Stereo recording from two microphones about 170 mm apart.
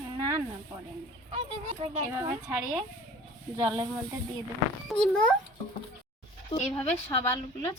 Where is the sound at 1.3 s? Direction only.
35° right (ahead or behind).